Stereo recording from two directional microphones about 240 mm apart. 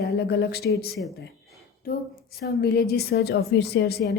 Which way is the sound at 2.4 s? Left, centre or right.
Left.